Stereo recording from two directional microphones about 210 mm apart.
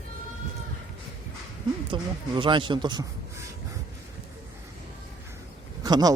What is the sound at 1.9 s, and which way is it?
A man's voice, 25° right (ahead or behind).